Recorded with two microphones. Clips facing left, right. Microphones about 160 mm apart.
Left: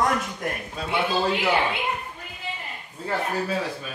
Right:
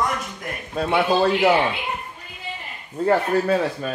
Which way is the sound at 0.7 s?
55° right (ahead or behind).